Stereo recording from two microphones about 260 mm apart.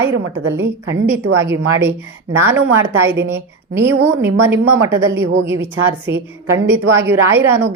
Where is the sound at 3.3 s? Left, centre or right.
Centre.